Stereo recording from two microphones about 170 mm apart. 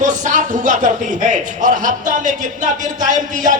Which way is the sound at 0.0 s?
50° right (ahead or behind).